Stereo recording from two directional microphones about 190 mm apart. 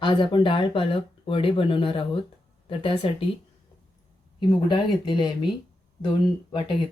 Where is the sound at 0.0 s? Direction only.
25° left (ahead or behind).